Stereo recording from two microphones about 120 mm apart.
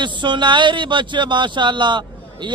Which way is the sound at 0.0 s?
40° right (ahead or behind).